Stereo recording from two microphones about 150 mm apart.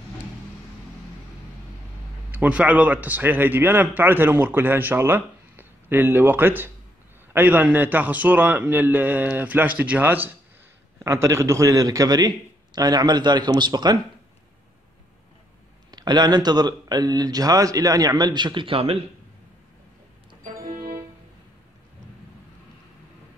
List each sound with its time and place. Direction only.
2.3 s a man's voice: 10° right (ahead or behind); by 13.9 s 30° right (ahead or behind)
15.9 s speech: 30° right (ahead or behind)
20.4 s music: 65° right (ahead or behind)